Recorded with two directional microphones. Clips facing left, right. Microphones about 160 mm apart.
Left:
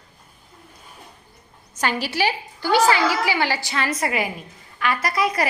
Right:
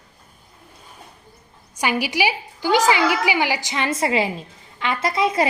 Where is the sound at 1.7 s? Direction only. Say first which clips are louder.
Right 2 dB; 10° right (ahead or behind).